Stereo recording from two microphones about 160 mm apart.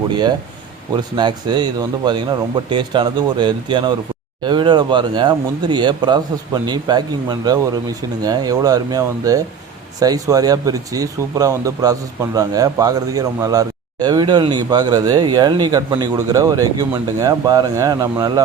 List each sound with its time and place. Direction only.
0.1 s speech: 25° right (ahead or behind)